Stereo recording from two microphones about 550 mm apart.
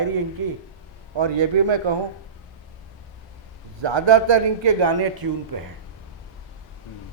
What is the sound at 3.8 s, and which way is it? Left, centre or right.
A man's voice, right.